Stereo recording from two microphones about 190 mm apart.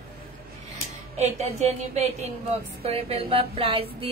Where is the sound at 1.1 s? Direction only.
35° right (ahead or behind).